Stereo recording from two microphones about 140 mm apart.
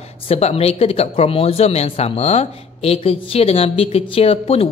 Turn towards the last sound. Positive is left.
turn(degrees=45)  # may be behind; listen again after turning